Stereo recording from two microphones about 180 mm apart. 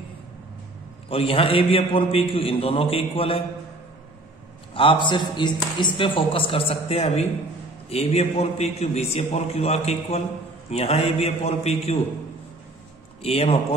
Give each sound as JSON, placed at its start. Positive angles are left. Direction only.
{"t": 1.1, "sound": "a man's voice", "side_deg": 30}
{"t": 4.7, "sound": "a man's voice", "side_deg": 25}
{"t": 13.2, "sound": "a man's voice", "side_deg": 35}